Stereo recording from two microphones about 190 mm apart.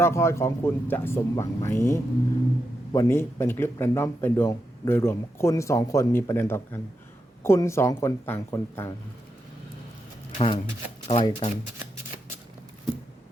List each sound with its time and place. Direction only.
0.0 s speech: 15° left (ahead or behind)
10.3 s speech: 25° left (ahead or behind)